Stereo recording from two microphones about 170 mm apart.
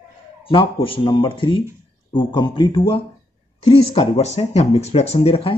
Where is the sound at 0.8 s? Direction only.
30° left (ahead or behind).